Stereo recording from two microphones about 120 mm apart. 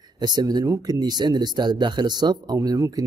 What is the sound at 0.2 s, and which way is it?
Speech, 35° right (ahead or behind).